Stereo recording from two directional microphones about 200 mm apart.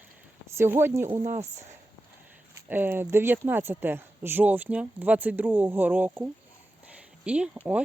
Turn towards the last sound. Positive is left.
turn(degrees=-5)  # may be behind; listen again after turning